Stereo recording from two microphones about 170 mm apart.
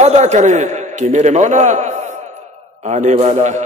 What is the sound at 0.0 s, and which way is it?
A man's voice, 40° right (ahead or behind).